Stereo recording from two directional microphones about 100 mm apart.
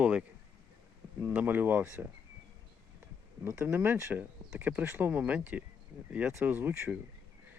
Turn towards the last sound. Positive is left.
turn(degrees=-20)  # may be behind; listen again after turning